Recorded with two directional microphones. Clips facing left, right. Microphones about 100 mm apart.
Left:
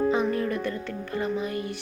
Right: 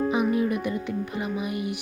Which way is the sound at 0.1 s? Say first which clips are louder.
Right 1 dB; 15° right (ahead or behind).